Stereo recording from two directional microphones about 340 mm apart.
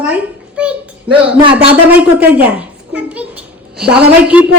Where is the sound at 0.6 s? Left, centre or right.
Centre.